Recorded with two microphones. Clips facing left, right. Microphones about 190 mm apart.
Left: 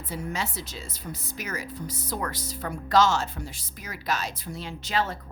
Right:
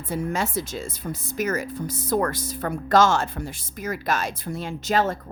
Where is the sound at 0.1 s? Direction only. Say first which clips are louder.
Right 7 dB; 50° right (ahead or behind).